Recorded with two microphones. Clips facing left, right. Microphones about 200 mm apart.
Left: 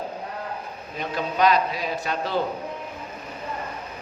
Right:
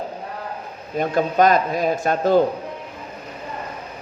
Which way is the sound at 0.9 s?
50° right (ahead or behind).